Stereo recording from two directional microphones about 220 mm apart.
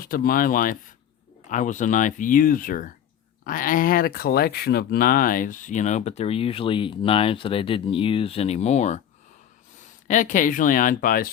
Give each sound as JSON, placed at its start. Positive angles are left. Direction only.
{"t": 0.0, "sound": "speech", "side_deg": 40}
{"t": 10.1, "sound": "speech", "side_deg": 35}